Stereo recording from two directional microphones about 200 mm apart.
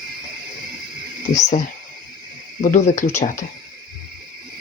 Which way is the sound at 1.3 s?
35° left (ahead or behind).